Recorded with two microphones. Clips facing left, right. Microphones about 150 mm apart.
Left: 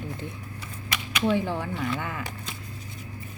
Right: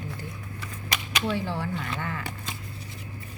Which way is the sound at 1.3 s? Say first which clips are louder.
Left 3 dB; 20° left (ahead or behind).